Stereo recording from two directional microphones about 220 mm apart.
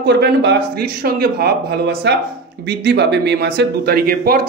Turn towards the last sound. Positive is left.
turn(degrees=-40)  # may be behind; listen again after turning